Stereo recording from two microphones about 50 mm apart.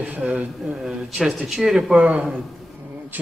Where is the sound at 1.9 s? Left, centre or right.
Right.